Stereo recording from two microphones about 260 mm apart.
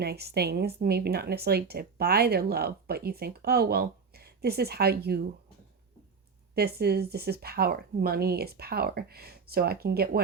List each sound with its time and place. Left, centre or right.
0.0 s speech: right
6.5 s speech: right